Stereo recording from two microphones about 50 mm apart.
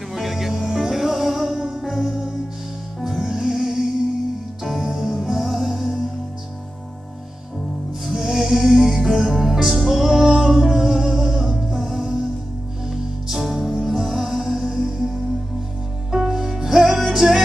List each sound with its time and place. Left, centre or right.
0.1 s music: centre
8.1 s music: centre